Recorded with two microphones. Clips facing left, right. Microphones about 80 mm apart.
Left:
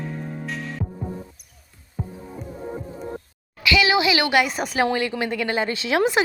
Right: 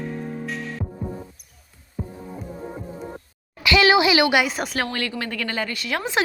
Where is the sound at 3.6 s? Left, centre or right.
Right.